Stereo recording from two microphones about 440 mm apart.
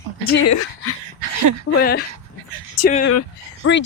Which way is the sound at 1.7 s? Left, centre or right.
Left.